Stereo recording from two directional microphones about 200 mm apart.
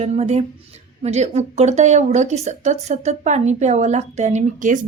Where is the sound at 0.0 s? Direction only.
35° right (ahead or behind).